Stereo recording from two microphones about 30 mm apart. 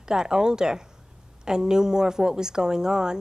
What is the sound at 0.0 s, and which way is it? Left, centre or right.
A woman's voice, right.